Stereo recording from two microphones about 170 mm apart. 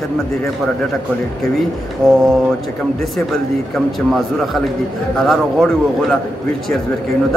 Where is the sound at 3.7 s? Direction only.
Centre (ahead or behind).